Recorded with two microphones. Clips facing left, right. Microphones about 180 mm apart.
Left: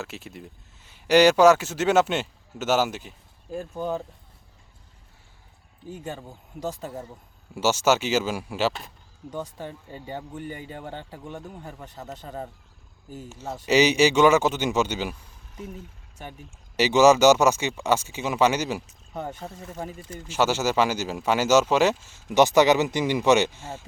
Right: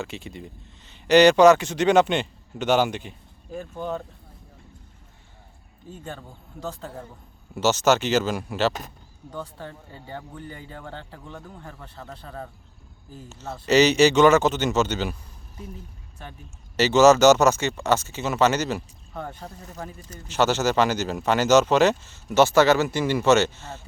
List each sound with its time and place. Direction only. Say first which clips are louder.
0.0 s speech: right 3 dB; centre (ahead or behind)
5.9 s a man's voice: left 2 dB; 15° left (ahead or behind)
7.5 s a man's voice: right 1 dB; 10° left (ahead or behind)
16.7 s a man's voice: right 1 dB; 10° left (ahead or behind)